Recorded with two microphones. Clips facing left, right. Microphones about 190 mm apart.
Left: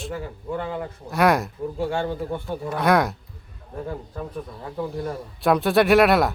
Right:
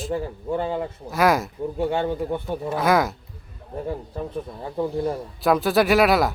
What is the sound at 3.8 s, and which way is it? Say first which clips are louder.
Speech: right 3 dB; 25° right (ahead or behind).